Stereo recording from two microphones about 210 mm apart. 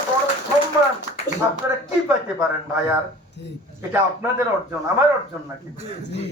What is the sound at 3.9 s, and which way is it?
Speech, 10° right (ahead or behind).